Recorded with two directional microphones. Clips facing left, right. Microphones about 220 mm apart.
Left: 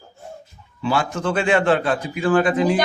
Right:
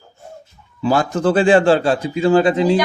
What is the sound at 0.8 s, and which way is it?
A man's voice, 40° right (ahead or behind).